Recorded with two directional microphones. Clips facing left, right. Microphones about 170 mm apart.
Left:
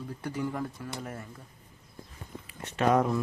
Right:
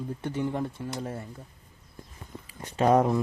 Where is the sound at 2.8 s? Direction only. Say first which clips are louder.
Right 3 dB; 35° right (ahead or behind).